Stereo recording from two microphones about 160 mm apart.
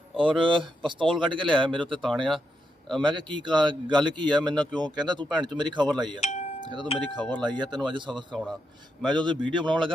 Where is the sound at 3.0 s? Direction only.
30° right (ahead or behind).